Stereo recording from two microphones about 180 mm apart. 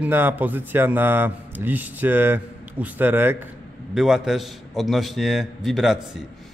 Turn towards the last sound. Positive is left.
turn(degrees=0)  # may be behind; listen again after turning